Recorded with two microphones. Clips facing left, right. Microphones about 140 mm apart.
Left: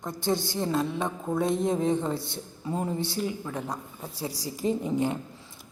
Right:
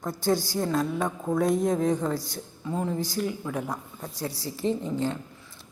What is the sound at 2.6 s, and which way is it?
A woman's voice, 10° left (ahead or behind).